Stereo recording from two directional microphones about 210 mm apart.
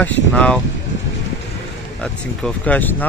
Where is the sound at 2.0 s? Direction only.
5° left (ahead or behind).